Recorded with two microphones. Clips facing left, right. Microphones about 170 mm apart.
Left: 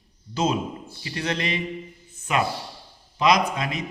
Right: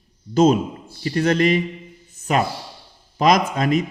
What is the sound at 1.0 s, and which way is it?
A man's voice, 45° right (ahead or behind).